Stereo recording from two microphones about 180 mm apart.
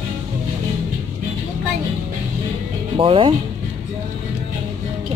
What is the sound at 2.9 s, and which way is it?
Speech, 30° right (ahead or behind).